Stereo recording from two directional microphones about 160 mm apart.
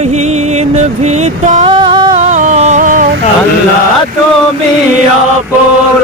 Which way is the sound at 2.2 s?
50° right (ahead or behind).